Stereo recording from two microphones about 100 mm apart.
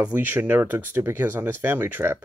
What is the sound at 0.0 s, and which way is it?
Speech, 15° right (ahead or behind).